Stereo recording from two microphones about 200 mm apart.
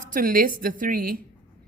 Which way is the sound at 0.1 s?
45° right (ahead or behind).